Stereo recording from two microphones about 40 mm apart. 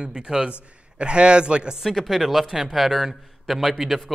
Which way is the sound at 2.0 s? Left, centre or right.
Centre.